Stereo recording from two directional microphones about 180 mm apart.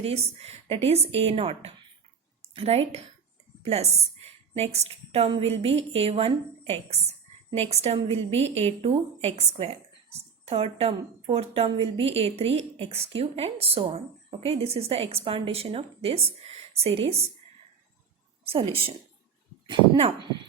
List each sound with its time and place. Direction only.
0.0 s a woman's voice: 35° right (ahead or behind)
18.4 s a woman's voice: 30° right (ahead or behind)
19.7 s a woman's voice: 35° right (ahead or behind)